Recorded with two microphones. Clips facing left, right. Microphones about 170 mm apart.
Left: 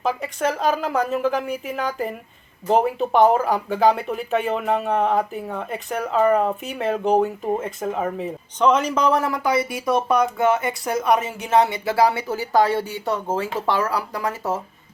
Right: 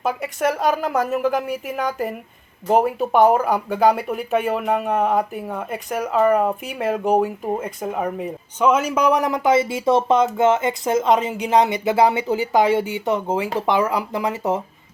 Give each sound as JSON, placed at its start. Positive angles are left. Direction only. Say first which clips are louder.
{"t": 0.3, "sound": "a man's voice", "louder": "right 3 dB", "side_deg": -10}